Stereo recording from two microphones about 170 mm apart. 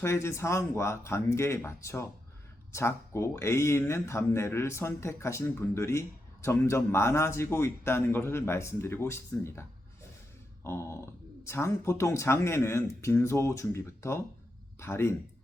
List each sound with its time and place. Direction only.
0.0 s speech: 15° left (ahead or behind)
10.6 s speech: 15° left (ahead or behind)